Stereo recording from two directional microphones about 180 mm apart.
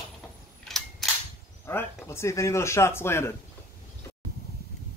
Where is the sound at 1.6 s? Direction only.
10° left (ahead or behind).